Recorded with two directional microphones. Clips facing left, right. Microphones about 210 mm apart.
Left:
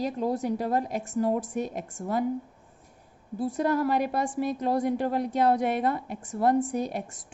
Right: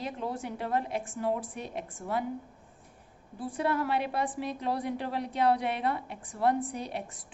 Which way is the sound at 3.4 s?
40° left (ahead or behind).